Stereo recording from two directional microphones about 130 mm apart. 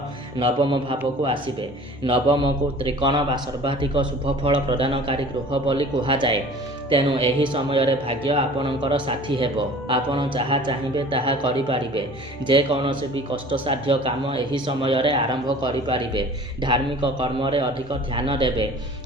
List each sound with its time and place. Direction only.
0.3 s a man's voice: 40° right (ahead or behind)